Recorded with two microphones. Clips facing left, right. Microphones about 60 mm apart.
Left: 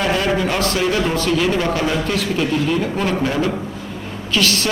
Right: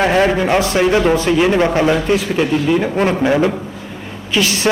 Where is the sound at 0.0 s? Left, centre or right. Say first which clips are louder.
Right 5 dB; right.